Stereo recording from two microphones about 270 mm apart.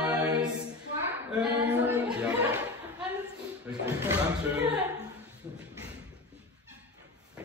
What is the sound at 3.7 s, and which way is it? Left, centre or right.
Chuckle, centre.